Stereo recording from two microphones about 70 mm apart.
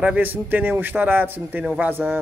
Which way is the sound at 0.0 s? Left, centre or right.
Right.